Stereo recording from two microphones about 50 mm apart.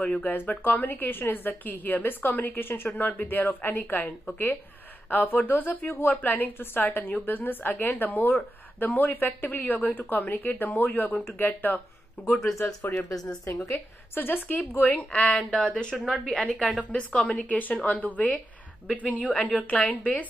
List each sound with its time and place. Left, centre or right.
0.0 s a woman's voice: left
0.3 s speech: left
5.1 s speech: left
12.8 s a woman's voice: left
13.5 s a woman's voice: left
13.7 s a woman's voice: left
15.2 s a woman's voice: centre
17.5 s a woman's voice: left